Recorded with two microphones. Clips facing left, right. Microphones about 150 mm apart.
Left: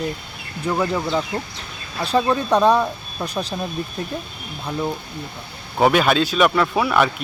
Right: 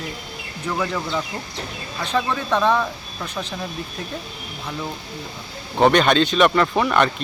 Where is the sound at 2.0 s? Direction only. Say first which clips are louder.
Left 4 dB; 35° left (ahead or behind).